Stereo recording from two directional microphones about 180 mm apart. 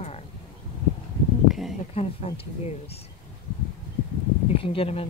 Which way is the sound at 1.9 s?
35° left (ahead or behind).